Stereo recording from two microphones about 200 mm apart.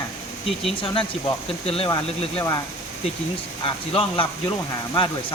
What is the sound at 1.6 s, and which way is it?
Speech, 30° left (ahead or behind).